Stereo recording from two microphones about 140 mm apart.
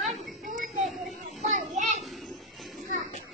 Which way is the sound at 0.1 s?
65° right (ahead or behind).